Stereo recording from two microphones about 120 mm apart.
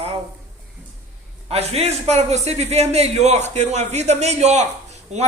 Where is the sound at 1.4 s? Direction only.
60° right (ahead or behind).